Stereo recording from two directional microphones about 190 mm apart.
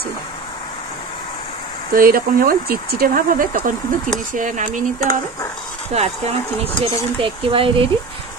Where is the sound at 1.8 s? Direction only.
50° right (ahead or behind).